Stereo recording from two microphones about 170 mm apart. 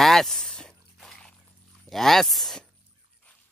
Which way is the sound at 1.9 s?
Centre (ahead or behind).